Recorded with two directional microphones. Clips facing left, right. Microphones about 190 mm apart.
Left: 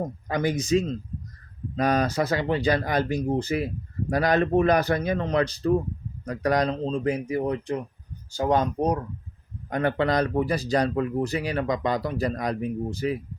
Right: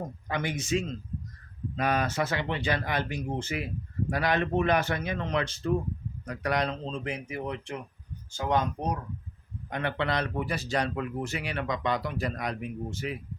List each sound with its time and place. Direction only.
0.3 s speech: 40° left (ahead or behind)